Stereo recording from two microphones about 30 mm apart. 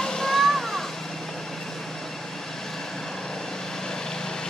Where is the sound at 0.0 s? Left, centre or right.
Centre.